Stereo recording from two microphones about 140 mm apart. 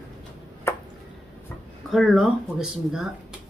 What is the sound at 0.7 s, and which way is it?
Drip, 15° left (ahead or behind).